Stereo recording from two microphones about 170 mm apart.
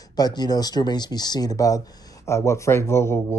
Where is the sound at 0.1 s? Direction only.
25° left (ahead or behind).